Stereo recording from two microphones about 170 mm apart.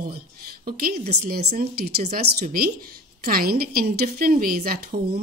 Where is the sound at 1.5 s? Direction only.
65° right (ahead or behind).